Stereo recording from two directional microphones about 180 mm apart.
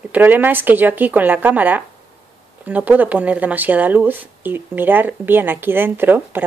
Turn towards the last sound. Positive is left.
turn(degrees=-10)  # may be behind; listen again after turning